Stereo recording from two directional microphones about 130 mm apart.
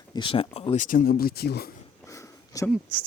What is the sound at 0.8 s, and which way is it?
Speech, 90° left.